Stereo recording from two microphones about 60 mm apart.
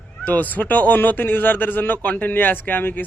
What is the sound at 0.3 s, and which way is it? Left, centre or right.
A man's voice, left.